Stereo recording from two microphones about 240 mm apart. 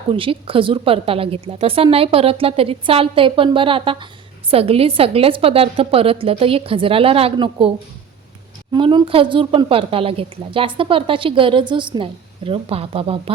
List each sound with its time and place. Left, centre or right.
0.1 s a woman's voice: right
8.7 s a woman's voice: centre